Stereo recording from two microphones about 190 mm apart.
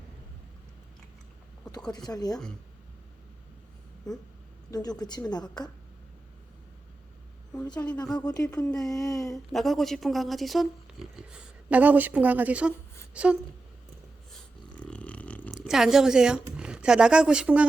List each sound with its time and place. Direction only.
2.0 s speech: 20° left (ahead or behind)
4.7 s speech: 20° left (ahead or behind)
7.5 s a woman's voice: 15° left (ahead or behind)
8.2 s a woman's voice: 20° left (ahead or behind)
9.3 s speech: centre (ahead or behind)
14.8 s a sound: 5° left (ahead or behind)